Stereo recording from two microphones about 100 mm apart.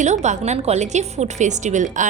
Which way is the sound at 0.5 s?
90° right.